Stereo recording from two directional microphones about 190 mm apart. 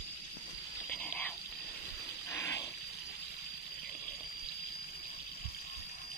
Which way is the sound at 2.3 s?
15° left (ahead or behind).